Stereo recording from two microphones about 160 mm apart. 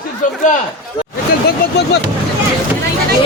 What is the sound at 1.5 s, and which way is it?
Speech, 90° left.